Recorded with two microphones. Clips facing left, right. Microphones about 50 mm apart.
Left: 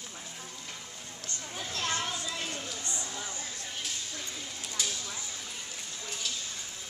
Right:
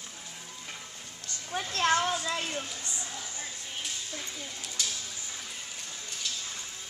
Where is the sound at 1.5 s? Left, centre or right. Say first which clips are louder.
Right 7 dB; right.